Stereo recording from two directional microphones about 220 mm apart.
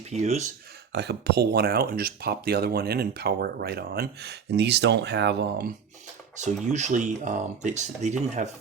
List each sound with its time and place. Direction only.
0.1 s speech: 30° right (ahead or behind)
0.9 s speech: 50° right (ahead or behind)
6.3 s speech: 35° right (ahead or behind)